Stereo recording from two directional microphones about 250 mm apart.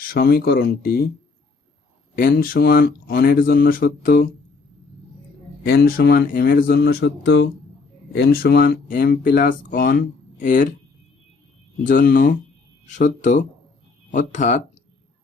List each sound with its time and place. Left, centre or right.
0.1 s speech: left
2.1 s speech: left
5.6 s speech: left
11.8 s speech: left